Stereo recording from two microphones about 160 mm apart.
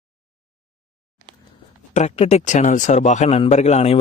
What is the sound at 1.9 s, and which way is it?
Speech, 45° left (ahead or behind).